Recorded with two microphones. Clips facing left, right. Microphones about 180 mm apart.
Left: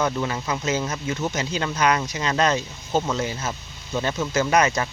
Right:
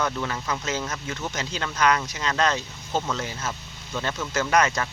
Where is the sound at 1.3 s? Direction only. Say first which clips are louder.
Left 5 dB; 10° left (ahead or behind).